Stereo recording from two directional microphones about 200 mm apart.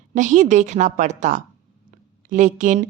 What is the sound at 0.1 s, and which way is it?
Speech, 40° right (ahead or behind).